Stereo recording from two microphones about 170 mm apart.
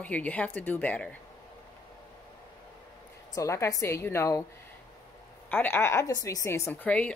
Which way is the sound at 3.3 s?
15° left (ahead or behind).